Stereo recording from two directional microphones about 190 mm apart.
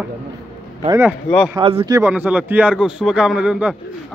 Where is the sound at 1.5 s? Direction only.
25° right (ahead or behind).